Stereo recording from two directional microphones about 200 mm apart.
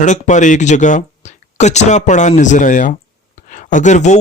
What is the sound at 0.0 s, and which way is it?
Speech, 40° left (ahead or behind).